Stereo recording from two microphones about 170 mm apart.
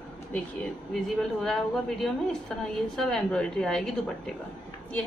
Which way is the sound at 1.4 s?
Centre (ahead or behind).